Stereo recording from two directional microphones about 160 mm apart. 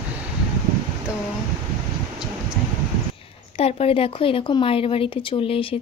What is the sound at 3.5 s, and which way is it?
Speech, 40° left (ahead or behind).